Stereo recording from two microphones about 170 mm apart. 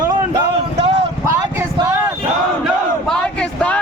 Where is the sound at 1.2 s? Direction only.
20° right (ahead or behind).